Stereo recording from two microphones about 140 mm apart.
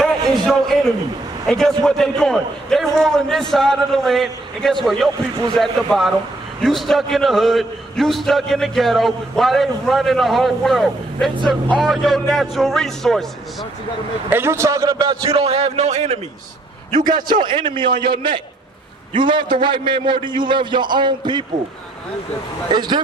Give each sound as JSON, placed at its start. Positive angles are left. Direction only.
{"t": 0.0, "sound": "a sound", "side_deg": 0}
{"t": 1.5, "sound": "a man's voice", "side_deg": 5}
{"t": 14.3, "sound": "a man's voice", "side_deg": -20}
{"t": 16.9, "sound": "a man's voice", "side_deg": -30}
{"t": 22.7, "sound": "a man's voice", "side_deg": -30}